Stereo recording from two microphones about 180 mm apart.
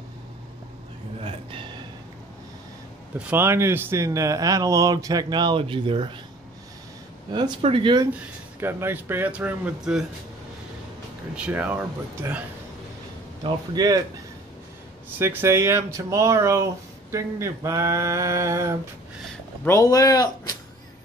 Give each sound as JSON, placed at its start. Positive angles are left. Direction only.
{"t": 1.2, "sound": "a sound", "side_deg": -30}
{"t": 3.2, "sound": "speech", "side_deg": -10}
{"t": 7.3, "sound": "speech", "side_deg": -25}
{"t": 8.1, "sound": "speech", "side_deg": -10}
{"t": 11.3, "sound": "speech", "side_deg": -5}
{"t": 13.4, "sound": "speech", "side_deg": -20}
{"t": 15.1, "sound": "speech", "side_deg": -10}
{"t": 19.6, "sound": "speech", "side_deg": 15}